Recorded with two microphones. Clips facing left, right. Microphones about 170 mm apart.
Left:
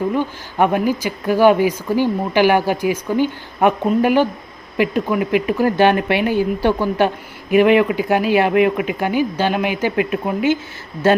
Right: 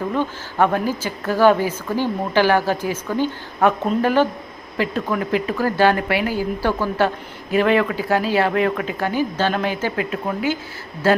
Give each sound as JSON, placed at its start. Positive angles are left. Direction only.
{"t": 0.1, "sound": "speech", "side_deg": 15}